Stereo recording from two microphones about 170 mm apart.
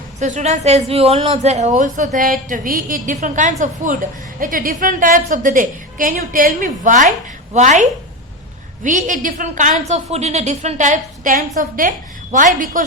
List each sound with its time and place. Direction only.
0.2 s a woman's voice: 45° right (ahead or behind)